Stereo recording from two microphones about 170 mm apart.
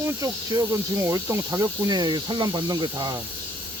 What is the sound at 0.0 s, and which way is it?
Speech, 20° right (ahead or behind).